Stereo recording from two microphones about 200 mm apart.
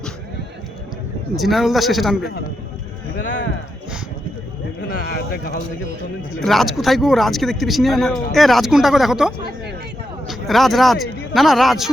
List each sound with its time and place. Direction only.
1.4 s speech: centre (ahead or behind)
4.9 s speech: 50° left (ahead or behind)
6.4 s speech: centre (ahead or behind)